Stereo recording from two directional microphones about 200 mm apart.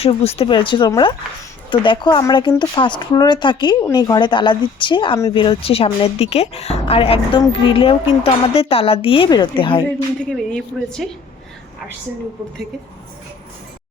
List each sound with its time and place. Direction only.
0.0 s speech: 30° left (ahead or behind)
10.3 s a woman's voice: centre (ahead or behind)